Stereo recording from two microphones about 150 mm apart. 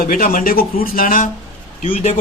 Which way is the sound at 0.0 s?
65° left (ahead or behind).